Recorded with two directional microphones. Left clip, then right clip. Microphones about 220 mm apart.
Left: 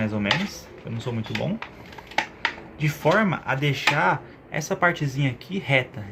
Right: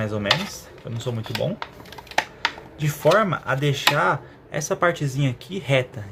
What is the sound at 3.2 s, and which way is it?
Speech, 65° right (ahead or behind).